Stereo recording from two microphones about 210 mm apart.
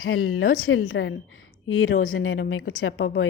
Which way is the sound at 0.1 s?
90° left.